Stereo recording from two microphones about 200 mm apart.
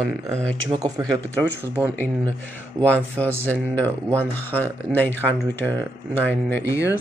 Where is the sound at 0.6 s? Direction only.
20° right (ahead or behind).